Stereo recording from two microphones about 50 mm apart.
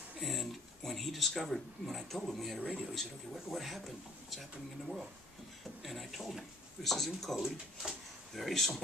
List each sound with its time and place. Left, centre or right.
0.2 s speech: centre
7.3 s speech: centre